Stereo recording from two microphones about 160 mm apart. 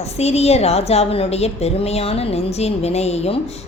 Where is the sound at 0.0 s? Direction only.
40° left (ahead or behind).